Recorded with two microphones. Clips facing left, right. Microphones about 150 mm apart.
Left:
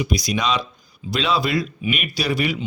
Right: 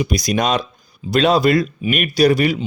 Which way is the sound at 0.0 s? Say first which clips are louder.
Right 4 dB; 50° right (ahead or behind).